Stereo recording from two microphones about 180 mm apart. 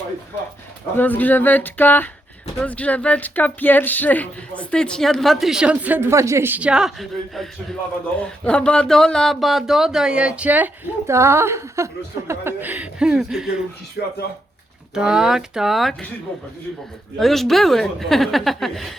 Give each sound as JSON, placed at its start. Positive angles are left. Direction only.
{"t": 0.9, "sound": "speech", "side_deg": 10}
{"t": 14.0, "sound": "speech", "side_deg": 65}
{"t": 14.9, "sound": "speech", "side_deg": -5}
{"t": 17.2, "sound": "speech", "side_deg": 0}